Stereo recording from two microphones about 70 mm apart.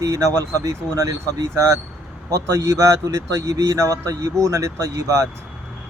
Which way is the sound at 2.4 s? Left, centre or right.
Right.